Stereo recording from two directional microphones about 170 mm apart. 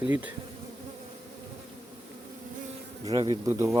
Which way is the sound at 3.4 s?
15° right (ahead or behind).